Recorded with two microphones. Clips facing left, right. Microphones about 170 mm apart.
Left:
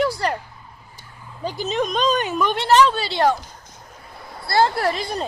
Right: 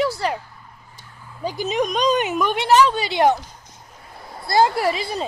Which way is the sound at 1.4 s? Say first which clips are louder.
Right 1 dB; 10° right (ahead or behind).